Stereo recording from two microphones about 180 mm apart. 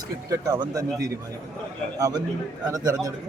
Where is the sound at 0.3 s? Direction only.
20° right (ahead or behind).